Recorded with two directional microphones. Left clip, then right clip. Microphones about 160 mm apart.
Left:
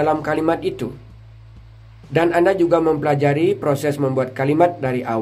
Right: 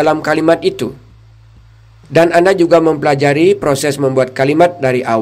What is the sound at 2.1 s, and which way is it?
A man's voice, 25° right (ahead or behind).